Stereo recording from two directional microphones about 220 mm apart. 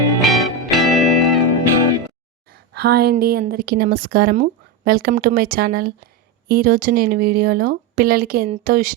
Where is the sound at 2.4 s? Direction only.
45° right (ahead or behind).